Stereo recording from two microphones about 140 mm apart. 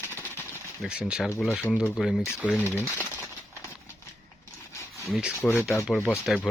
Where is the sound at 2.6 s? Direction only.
20° left (ahead or behind).